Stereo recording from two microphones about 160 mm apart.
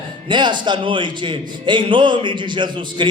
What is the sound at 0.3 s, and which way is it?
A man's voice, 30° right (ahead or behind).